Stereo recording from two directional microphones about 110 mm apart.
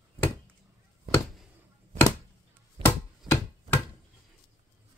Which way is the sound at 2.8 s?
20° left (ahead or behind).